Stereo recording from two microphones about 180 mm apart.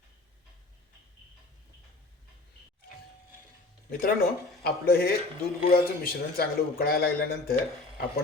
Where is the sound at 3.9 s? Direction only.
55° left (ahead or behind).